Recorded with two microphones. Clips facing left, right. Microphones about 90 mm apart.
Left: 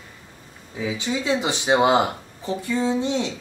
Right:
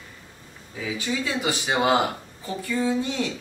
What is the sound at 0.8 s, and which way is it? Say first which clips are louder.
Speech: left 2 dB; 20° left (ahead or behind).